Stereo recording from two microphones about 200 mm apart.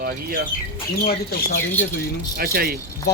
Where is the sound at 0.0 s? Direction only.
50° right (ahead or behind).